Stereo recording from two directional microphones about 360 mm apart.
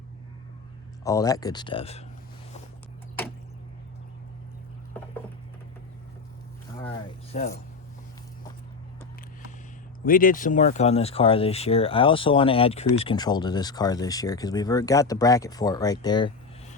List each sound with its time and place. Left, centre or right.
1.0 s speech: centre
7.3 s speech: left
10.1 s speech: left